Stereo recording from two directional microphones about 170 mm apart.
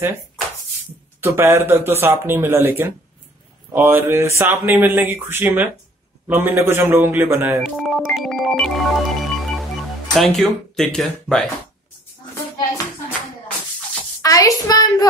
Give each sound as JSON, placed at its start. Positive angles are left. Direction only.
{"t": 1.2, "sound": "speech", "side_deg": -15}
{"t": 7.6, "sound": "organ", "side_deg": 0}
{"t": 10.1, "sound": "organ", "side_deg": 0}
{"t": 12.4, "sound": "hands", "side_deg": 20}
{"t": 14.2, "sound": "a woman's voice", "side_deg": 20}